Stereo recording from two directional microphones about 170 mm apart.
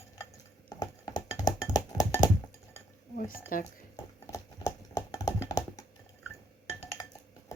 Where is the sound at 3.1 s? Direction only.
55° left (ahead or behind).